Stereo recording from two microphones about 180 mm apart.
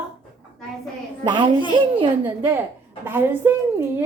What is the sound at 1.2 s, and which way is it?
Speech, 25° right (ahead or behind).